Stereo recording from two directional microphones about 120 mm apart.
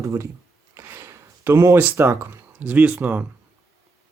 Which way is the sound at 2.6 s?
15° right (ahead or behind).